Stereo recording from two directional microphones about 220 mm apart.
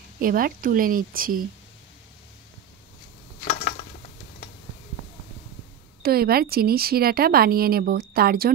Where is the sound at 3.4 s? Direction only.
45° left (ahead or behind).